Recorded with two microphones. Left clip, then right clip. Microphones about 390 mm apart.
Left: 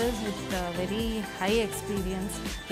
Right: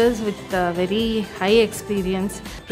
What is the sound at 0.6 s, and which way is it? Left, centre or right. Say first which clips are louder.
Speech: right 13 dB; left.